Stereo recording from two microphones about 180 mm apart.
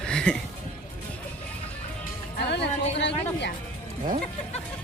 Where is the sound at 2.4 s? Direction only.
75° left (ahead or behind).